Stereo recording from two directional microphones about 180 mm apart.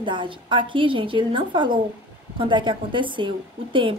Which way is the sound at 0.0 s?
25° right (ahead or behind).